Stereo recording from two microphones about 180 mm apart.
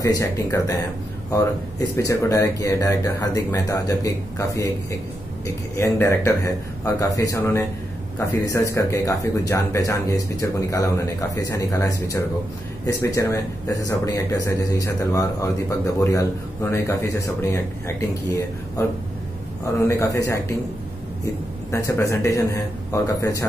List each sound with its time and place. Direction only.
0.0 s speech: 15° left (ahead or behind)
5.8 s speech: 15° left (ahead or behind)
19.9 s speech: 15° left (ahead or behind)
21.7 s speech: 15° left (ahead or behind)